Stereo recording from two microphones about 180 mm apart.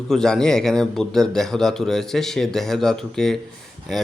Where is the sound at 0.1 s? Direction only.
Centre (ahead or behind).